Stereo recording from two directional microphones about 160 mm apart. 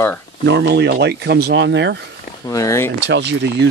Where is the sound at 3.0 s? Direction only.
90° right.